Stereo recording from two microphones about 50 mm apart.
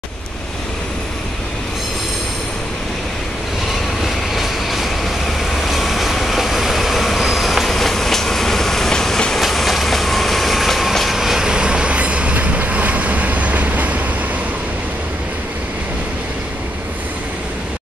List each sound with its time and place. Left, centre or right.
4.0 s vehicle: centre
9.4 s train: centre; by 14.0 s right